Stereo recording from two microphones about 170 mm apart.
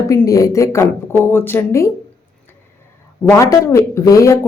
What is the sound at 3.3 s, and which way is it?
Speech, 15° left (ahead or behind).